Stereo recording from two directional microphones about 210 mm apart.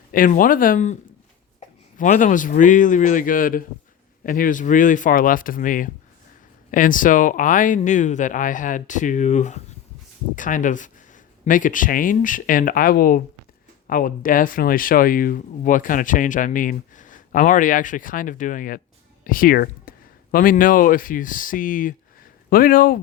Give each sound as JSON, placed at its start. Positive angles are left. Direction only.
{"t": 0.1, "sound": "a man's voice", "side_deg": 40}